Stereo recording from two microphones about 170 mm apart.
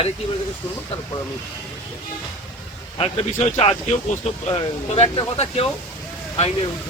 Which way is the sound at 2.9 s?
35° left (ahead or behind).